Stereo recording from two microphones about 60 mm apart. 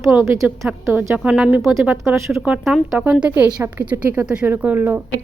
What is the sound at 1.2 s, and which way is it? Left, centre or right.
Speech, centre.